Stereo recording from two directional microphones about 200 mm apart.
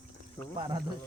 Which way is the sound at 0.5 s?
25° right (ahead or behind).